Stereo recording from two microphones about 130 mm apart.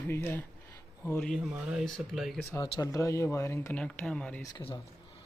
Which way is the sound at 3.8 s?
10° left (ahead or behind).